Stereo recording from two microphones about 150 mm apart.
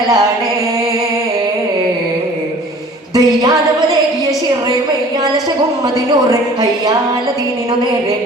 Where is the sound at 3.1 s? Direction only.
25° right (ahead or behind).